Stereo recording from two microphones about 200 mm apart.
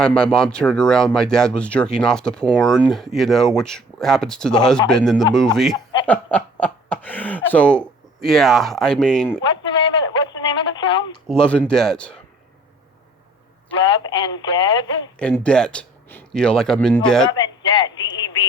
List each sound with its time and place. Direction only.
0.0 s speech: 5° left (ahead or behind)
10.1 s radio: 20° left (ahead or behind)
11.3 s speech: 5° left (ahead or behind)
14.0 s speech: 20° left (ahead or behind)
15.2 s speech: 5° left (ahead or behind)
17.2 s a sound: 20° left (ahead or behind)